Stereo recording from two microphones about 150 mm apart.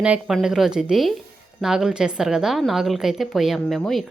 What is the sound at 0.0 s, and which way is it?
A woman's voice, 5° right (ahead or behind).